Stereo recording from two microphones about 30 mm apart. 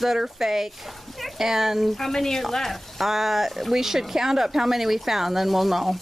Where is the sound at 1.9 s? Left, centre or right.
Centre.